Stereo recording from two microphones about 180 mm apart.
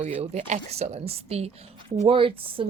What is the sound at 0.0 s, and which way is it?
Speech, 35° right (ahead or behind).